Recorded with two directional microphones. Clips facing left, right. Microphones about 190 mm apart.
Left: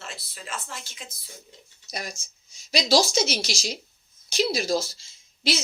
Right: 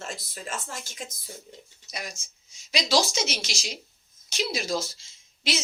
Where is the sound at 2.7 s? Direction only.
35° left (ahead or behind).